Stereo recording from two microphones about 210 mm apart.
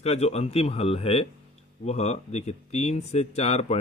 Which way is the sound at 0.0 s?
30° left (ahead or behind).